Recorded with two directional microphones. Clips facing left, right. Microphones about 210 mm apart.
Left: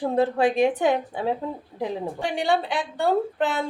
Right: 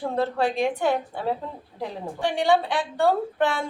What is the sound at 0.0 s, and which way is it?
A woman's voice, 15° left (ahead or behind).